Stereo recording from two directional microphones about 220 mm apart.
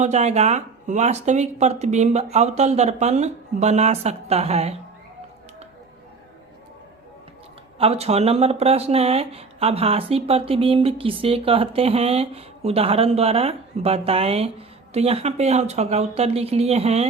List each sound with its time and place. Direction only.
0.0 s speech: 30° right (ahead or behind)
7.8 s speech: 25° right (ahead or behind)